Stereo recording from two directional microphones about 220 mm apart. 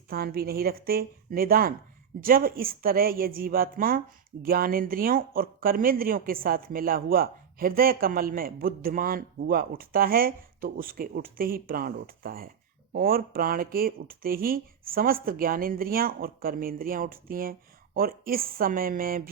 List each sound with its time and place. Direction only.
0.1 s a woman's voice: 45° right (ahead or behind)